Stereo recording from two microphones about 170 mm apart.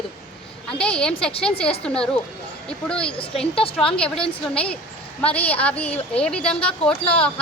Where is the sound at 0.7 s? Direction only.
5° left (ahead or behind).